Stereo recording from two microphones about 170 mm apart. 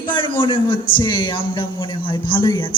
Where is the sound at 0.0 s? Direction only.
30° left (ahead or behind).